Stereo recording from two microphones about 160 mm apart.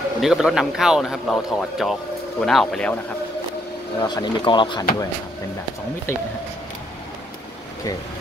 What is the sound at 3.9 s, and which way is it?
Speech, 25° left (ahead or behind).